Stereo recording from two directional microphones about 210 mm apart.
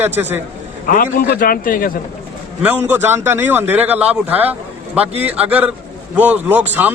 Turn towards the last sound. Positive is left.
turn(degrees=-10)  # may be behind; listen again after turning